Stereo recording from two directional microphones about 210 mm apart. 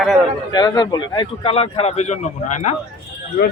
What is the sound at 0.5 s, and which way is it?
A man's voice, 20° left (ahead or behind).